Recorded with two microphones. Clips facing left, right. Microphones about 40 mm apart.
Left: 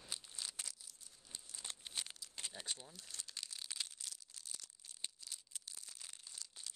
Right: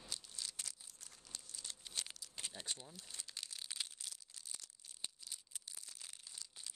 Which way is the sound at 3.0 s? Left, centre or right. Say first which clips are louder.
Left 1 dB; centre.